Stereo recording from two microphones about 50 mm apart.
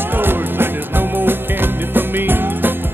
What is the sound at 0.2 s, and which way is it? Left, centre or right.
Music, right.